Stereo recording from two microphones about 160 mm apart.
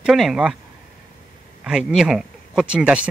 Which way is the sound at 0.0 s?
5° right (ahead or behind).